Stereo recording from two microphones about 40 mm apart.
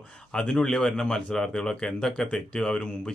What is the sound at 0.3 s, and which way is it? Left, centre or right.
Speech, left.